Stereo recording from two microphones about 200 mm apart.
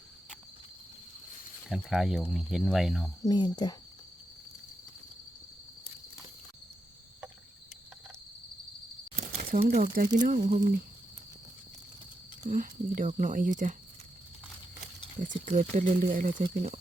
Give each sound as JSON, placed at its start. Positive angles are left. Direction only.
{"t": 1.7, "sound": "speech", "side_deg": 0}
{"t": 3.2, "sound": "speech", "side_deg": 20}
{"t": 9.1, "sound": "crumpling", "side_deg": -40}
{"t": 10.2, "sound": "speech", "side_deg": -40}
{"t": 12.5, "sound": "speech", "side_deg": -40}
{"t": 15.2, "sound": "speech", "side_deg": -40}